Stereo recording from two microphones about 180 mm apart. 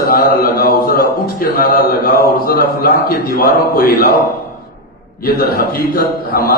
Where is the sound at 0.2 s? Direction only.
55° left (ahead or behind).